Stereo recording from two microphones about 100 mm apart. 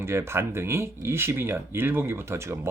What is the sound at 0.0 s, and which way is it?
Speech, 25° right (ahead or behind).